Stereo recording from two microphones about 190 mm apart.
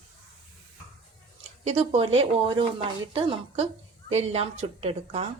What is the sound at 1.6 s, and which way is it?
A woman's voice, 30° right (ahead or behind).